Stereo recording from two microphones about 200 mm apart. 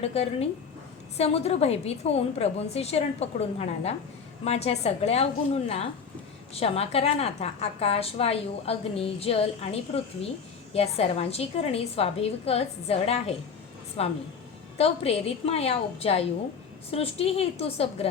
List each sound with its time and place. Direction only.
0.0 s a woman's voice: 30° left (ahead or behind)